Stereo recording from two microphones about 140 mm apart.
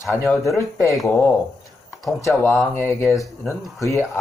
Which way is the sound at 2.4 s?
15° left (ahead or behind).